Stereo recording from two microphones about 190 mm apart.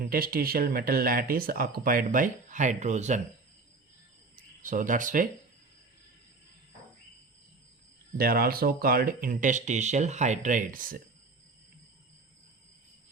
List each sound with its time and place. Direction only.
0.1 s speech: 50° right (ahead or behind)
4.4 s speech: 45° right (ahead or behind)
8.2 s speech: 50° right (ahead or behind)